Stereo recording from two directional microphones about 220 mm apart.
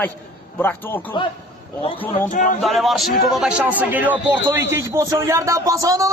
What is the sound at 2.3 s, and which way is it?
Speech, 35° left (ahead or behind).